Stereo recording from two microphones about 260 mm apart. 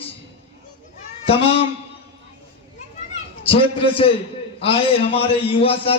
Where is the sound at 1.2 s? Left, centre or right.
Left.